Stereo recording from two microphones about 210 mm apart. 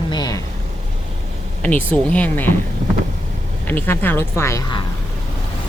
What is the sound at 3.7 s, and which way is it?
A woman's voice, 10° left (ahead or behind).